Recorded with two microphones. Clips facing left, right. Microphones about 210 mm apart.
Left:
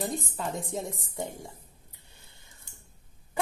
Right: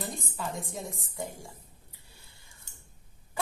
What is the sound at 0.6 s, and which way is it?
Speech, 25° left (ahead or behind).